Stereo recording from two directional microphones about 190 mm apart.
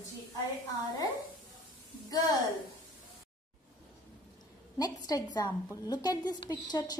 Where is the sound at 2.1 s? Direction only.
20° left (ahead or behind).